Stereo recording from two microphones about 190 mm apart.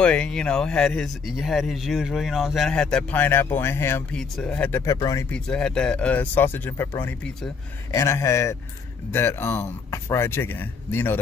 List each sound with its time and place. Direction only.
0.0 s speech: 5° left (ahead or behind)